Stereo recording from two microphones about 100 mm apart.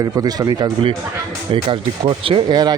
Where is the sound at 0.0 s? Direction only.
40° right (ahead or behind).